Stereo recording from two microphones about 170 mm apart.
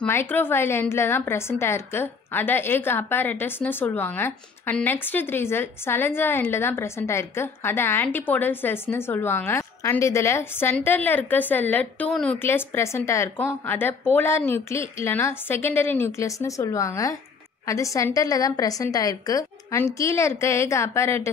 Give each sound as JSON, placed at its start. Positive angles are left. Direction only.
{"t": 0.0, "sound": "a woman's voice", "side_deg": 10}